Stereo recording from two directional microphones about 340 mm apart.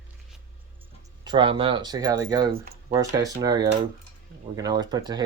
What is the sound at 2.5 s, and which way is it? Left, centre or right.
Speech, right.